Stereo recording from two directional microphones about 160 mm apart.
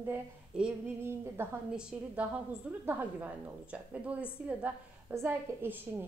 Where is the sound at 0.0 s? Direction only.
10° right (ahead or behind).